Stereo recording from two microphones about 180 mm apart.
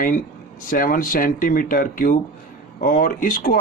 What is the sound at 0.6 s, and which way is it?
A man's voice, 50° left (ahead or behind).